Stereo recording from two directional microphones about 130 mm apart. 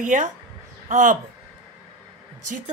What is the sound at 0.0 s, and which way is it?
Speech, 70° right (ahead or behind).